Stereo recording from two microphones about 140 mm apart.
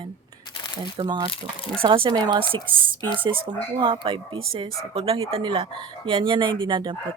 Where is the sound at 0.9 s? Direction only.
35° right (ahead or behind).